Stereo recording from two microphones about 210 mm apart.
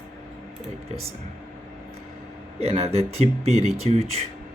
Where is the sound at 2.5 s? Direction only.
30° right (ahead or behind).